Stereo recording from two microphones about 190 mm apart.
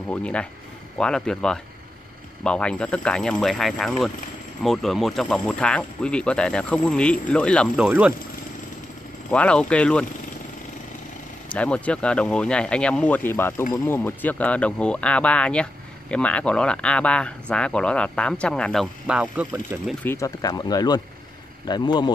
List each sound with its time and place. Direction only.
0.1 s speech: 5° left (ahead or behind)
7.8 s speech: 5° right (ahead or behind)
9.3 s speech: 5° left (ahead or behind)
11.4 s speech: 5° left (ahead or behind); by 19.8 s 10° right (ahead or behind)
19.9 s speech: 10° left (ahead or behind)